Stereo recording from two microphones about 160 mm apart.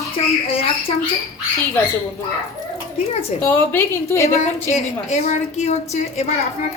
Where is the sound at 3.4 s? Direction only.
15° left (ahead or behind).